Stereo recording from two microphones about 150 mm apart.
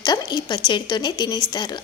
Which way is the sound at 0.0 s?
25° left (ahead or behind).